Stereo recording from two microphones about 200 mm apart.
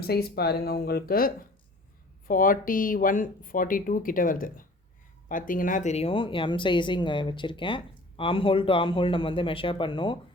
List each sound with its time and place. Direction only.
0.0 s speech: 50° left (ahead or behind); by 10.2 s 25° left (ahead or behind)